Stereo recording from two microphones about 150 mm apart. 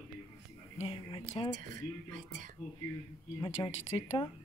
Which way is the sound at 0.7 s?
35° left (ahead or behind).